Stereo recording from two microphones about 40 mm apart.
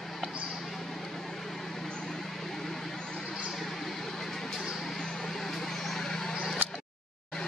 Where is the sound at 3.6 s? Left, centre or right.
Centre.